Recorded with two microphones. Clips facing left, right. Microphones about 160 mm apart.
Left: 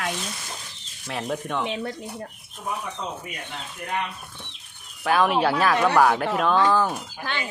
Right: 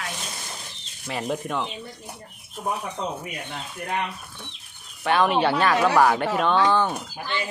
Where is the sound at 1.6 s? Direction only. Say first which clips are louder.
Left 7 dB; 85° left.